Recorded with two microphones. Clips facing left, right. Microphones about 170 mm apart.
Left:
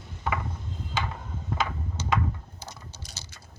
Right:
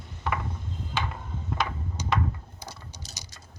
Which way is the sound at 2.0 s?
15° right (ahead or behind).